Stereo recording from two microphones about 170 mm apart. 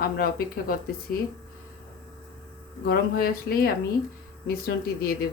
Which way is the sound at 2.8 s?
60° left (ahead or behind).